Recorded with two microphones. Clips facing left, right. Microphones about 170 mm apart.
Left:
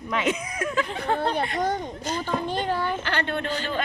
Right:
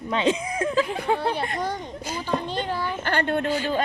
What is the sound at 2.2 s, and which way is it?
Speech, 50° left (ahead or behind).